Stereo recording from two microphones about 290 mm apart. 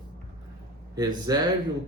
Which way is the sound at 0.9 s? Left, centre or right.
Centre.